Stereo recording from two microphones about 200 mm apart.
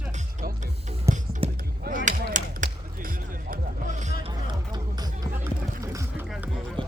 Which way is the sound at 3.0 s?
45° right (ahead or behind).